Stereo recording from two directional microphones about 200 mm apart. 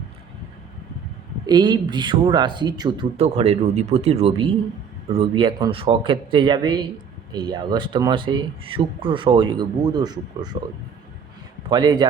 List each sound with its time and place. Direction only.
1.5 s speech: 20° right (ahead or behind)
3.2 s speech: 30° right (ahead or behind)
11.7 s speech: 20° right (ahead or behind)